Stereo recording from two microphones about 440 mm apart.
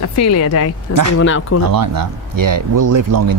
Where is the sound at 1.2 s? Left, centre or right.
Left.